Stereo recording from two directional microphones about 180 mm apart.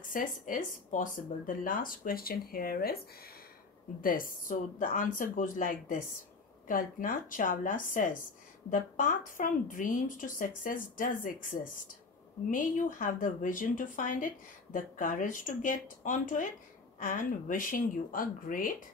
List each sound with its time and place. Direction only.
0.1 s a woman's voice: 50° left (ahead or behind)
4.0 s a woman's voice: 50° left (ahead or behind)